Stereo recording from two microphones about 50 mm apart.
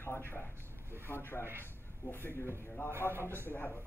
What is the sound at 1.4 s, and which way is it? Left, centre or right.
Speech, right.